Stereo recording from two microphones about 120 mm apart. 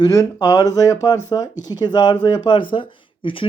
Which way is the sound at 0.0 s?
30° left (ahead or behind).